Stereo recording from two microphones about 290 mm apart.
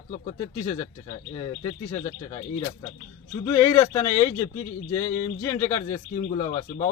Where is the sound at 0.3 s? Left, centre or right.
Centre.